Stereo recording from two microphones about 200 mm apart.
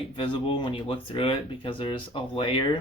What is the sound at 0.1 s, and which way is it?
Speech, 25° left (ahead or behind).